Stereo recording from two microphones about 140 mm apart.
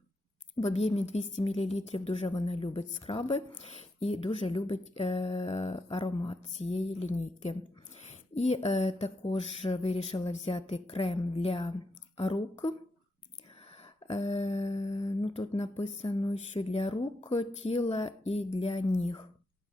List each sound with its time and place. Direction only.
0.5 s speech: 50° left (ahead or behind)
8.6 s speech: 50° left (ahead or behind)
14.1 s speech: 50° left (ahead or behind)